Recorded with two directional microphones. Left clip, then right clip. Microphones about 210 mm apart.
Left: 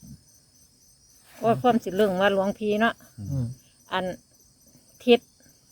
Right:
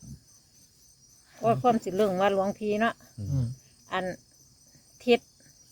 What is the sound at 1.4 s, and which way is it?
Speech, 30° left (ahead or behind).